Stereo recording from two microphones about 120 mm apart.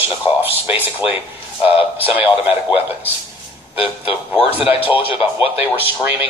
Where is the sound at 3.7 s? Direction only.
50° left (ahead or behind).